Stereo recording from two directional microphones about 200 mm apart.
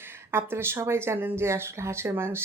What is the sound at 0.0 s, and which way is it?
Speech, 10° right (ahead or behind).